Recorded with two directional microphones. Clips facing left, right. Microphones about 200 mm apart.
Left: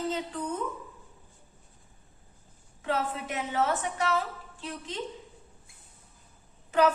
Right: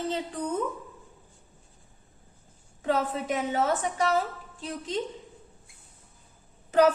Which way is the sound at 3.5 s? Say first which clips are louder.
Left 1 dB; 40° right (ahead or behind).